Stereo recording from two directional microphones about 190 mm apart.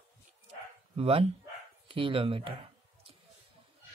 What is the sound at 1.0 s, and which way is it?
Speech, 30° right (ahead or behind).